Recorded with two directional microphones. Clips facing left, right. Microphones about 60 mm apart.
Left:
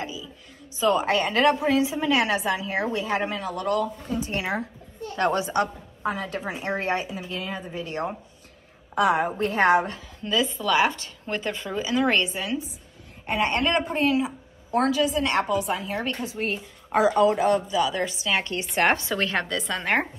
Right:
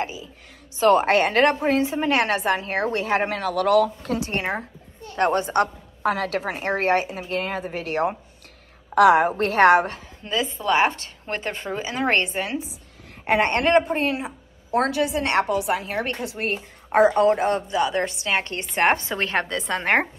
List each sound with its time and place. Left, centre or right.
0.0 s a woman's voice: right
5.2 s a woman's voice: right
6.0 s a woman's voice: right
10.2 s a woman's voice: right
18.8 s speech: right